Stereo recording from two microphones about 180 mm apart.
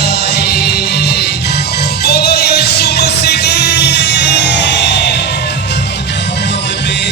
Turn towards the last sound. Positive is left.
turn(degrees=75)  # may be behind; listen again after turning